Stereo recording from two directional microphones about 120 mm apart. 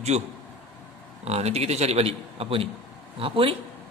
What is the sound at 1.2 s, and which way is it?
Speech, 60° right (ahead or behind).